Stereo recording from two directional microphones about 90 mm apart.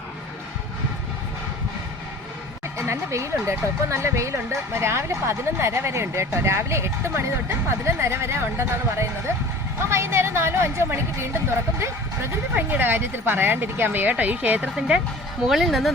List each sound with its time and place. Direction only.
2.7 s speech: 30° right (ahead or behind); by 15.9 s centre (ahead or behind)